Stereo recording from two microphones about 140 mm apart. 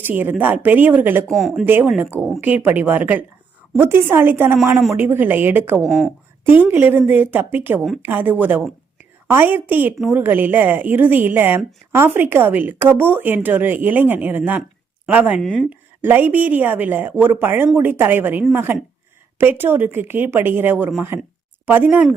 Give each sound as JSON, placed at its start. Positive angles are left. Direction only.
{"t": 0.0, "sound": "a woman's voice", "side_deg": -15}
{"t": 1.3, "sound": "speech", "side_deg": 0}
{"t": 1.6, "sound": "a woman's voice", "side_deg": -15}
{"t": 5.8, "sound": "speech", "side_deg": 0}
{"t": 6.4, "sound": "a woman's voice", "side_deg": -15}
{"t": 15.4, "sound": "speech", "side_deg": 0}
{"t": 15.7, "sound": "a woman's voice", "side_deg": -15}